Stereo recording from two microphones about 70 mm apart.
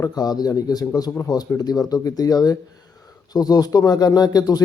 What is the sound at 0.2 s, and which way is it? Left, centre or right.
A man's voice, left.